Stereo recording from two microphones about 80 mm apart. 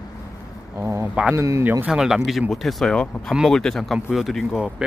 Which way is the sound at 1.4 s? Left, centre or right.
Right.